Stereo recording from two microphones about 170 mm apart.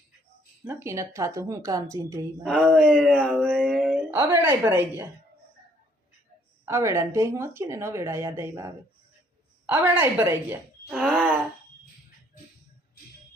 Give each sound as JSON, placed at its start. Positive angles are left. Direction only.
{"t": 0.7, "sound": "speech", "side_deg": -15}
{"t": 2.4, "sound": "speech", "side_deg": 5}
{"t": 2.9, "sound": "speech", "side_deg": -5}
{"t": 3.4, "sound": "a sound", "side_deg": 5}
{"t": 4.1, "sound": "speech", "side_deg": -15}
{"t": 6.7, "sound": "speech", "side_deg": -15}
{"t": 10.8, "sound": "groan", "side_deg": 0}